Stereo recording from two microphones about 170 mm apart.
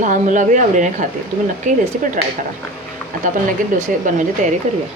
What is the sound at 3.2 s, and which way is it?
Speech, 50° right (ahead or behind).